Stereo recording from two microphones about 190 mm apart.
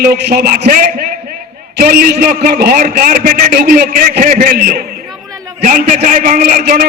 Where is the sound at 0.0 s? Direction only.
55° right (ahead or behind).